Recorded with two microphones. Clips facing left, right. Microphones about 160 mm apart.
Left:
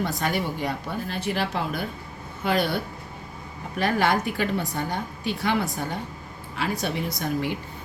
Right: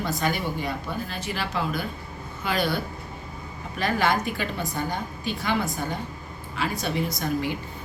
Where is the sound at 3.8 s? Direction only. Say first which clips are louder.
Left 1 dB; 65° left (ahead or behind).